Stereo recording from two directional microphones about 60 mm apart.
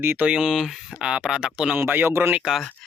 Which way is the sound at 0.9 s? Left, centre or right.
Centre.